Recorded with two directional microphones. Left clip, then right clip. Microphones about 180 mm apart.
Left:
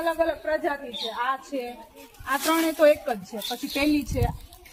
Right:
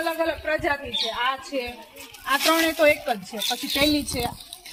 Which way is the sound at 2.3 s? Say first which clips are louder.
Right 3 dB; 15° right (ahead or behind).